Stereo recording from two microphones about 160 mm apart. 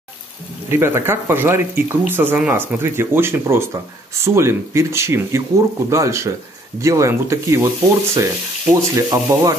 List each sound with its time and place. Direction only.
0.7 s speech: 15° right (ahead or behind)